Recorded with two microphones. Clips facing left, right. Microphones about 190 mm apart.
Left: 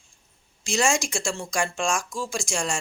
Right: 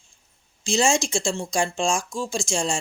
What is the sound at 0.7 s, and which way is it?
Speech, 25° right (ahead or behind).